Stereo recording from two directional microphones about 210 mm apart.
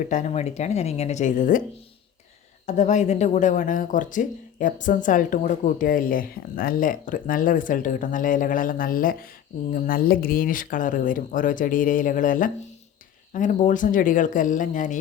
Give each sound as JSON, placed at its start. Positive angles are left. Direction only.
{"t": 0.0, "sound": "speech", "side_deg": 35}
{"t": 2.6, "sound": "speech", "side_deg": 35}